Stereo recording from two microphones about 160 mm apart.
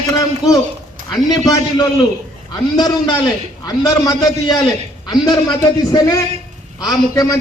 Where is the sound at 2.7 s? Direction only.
25° left (ahead or behind).